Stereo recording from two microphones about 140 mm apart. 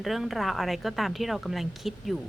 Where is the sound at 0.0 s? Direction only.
Centre (ahead or behind).